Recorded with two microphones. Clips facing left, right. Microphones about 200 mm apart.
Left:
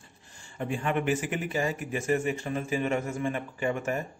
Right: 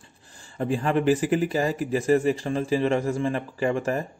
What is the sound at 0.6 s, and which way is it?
Speech, 35° right (ahead or behind).